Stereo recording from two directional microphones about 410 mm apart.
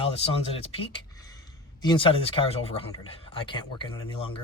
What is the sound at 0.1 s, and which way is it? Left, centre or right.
Speech, centre.